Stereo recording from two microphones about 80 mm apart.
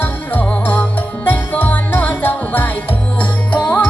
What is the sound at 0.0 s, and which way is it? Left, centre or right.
Music, left.